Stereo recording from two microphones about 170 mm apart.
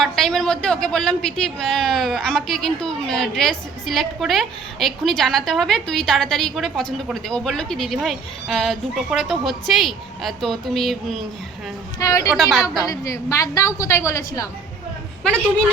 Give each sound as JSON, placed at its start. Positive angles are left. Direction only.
{"t": 0.0, "sound": "a man's voice", "side_deg": 0}
{"t": 11.9, "sound": "a woman's voice", "side_deg": 20}
{"t": 12.3, "sound": "a man's voice", "side_deg": 0}
{"t": 12.8, "sound": "a woman's voice", "side_deg": 20}